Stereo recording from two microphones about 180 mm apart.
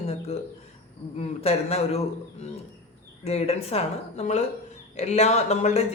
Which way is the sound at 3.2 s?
35° left (ahead or behind).